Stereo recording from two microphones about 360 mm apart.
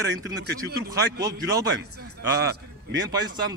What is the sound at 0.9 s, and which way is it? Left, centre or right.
Speech, centre.